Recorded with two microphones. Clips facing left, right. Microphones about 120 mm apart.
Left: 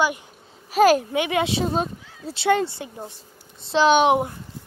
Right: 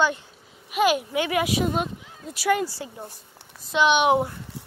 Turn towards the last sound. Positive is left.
turn(degrees=35)  # may be behind; listen again after turning